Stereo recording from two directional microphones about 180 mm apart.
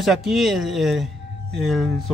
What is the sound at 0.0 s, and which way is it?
A man's voice, centre (ahead or behind).